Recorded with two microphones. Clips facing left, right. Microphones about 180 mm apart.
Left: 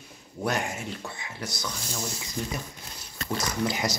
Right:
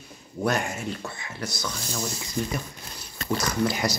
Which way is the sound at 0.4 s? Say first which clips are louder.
Right 3 dB; 20° left (ahead or behind).